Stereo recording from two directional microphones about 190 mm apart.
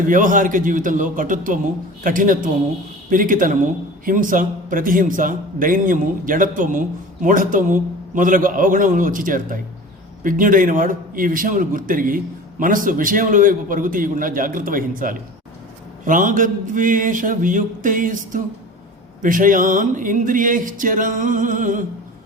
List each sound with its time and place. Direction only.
0.0 s a man's voice: 45° right (ahead or behind)